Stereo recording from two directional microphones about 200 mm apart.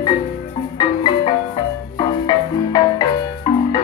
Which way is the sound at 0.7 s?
25° left (ahead or behind).